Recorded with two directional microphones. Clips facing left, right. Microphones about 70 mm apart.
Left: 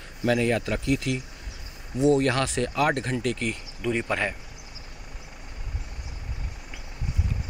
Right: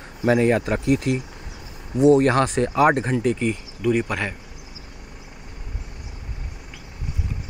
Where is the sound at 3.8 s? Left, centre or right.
Centre.